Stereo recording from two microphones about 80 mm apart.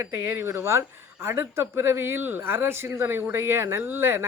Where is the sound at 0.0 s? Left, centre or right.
Right.